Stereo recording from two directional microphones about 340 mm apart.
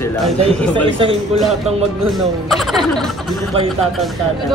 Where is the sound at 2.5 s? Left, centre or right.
Centre.